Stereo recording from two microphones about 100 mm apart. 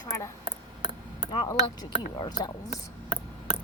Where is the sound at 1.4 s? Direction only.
45° left (ahead or behind).